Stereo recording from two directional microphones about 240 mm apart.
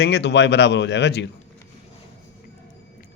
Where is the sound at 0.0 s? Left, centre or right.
Left.